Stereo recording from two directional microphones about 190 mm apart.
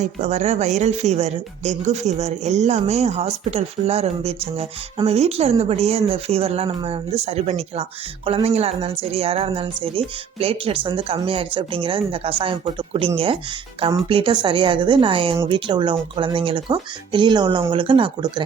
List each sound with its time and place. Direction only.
0.0 s speech: 35° right (ahead or behind)